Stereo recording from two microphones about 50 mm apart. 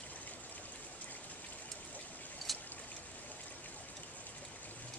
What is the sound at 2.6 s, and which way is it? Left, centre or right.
Stream, left.